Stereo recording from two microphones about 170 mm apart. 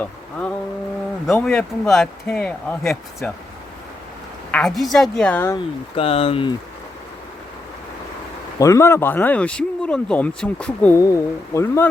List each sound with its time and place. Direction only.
0.0 s a sound: 10° left (ahead or behind)
1.3 s speech: 5° left (ahead or behind)
4.5 s speech: centre (ahead or behind)
6.0 s speech: 35° left (ahead or behind)
8.5 s speech: 15° left (ahead or behind)
11.0 s speech: 20° left (ahead or behind)